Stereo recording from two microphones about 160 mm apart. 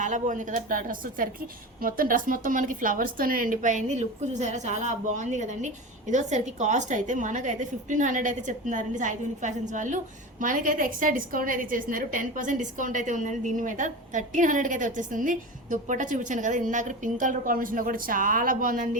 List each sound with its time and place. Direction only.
0.0 s a woman's voice: 50° right (ahead or behind)